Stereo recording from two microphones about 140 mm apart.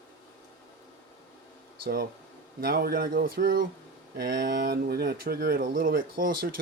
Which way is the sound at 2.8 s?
90° right.